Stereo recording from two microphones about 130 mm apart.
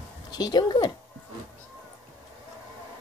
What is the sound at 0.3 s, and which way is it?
Speech, 30° left (ahead or behind).